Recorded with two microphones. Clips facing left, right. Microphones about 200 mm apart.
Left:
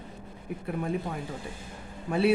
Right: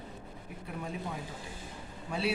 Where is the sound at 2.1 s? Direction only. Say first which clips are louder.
Left 9 dB; 55° left (ahead or behind).